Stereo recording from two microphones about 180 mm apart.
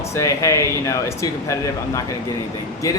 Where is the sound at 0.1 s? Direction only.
15° left (ahead or behind).